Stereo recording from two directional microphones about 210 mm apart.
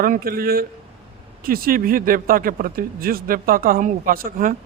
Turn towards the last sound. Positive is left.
turn(degrees=-40)  # may be behind; listen again after turning